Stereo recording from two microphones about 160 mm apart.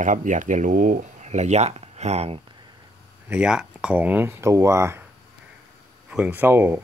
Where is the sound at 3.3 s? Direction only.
5° right (ahead or behind).